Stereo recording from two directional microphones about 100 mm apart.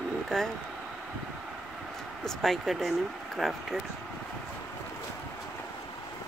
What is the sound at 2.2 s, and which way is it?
Speech, 5° left (ahead or behind).